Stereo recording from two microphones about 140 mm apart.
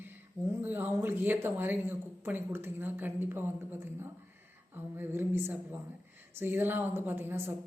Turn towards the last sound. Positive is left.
turn(degrees=-15)  # may be behind; listen again after turning